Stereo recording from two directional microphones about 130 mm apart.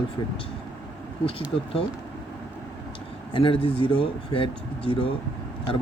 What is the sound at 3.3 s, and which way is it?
Speech, 45° left (ahead or behind).